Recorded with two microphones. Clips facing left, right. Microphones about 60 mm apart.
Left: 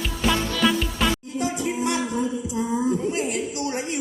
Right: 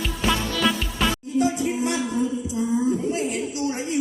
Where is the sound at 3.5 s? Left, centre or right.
Left.